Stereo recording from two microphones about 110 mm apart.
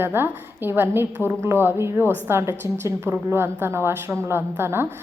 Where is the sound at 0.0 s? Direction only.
20° right (ahead or behind).